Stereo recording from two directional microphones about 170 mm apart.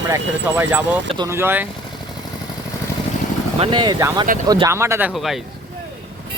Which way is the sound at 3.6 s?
25° right (ahead or behind).